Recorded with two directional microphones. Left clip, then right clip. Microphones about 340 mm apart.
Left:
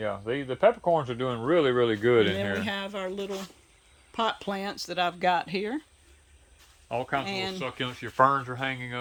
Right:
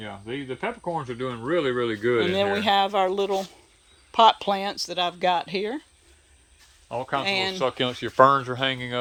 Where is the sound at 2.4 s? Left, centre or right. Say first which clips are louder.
Right 10 dB; centre.